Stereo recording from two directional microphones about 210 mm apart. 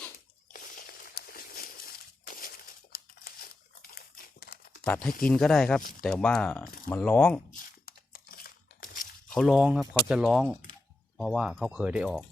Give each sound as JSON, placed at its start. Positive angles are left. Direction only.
{"t": 0.5, "sound": "a sound", "side_deg": 45}
{"t": 3.9, "sound": "crumpling", "side_deg": 50}
{"t": 5.2, "sound": "speech", "side_deg": 5}
{"t": 7.9, "sound": "crumpling", "side_deg": 45}
{"t": 9.3, "sound": "speech", "side_deg": 0}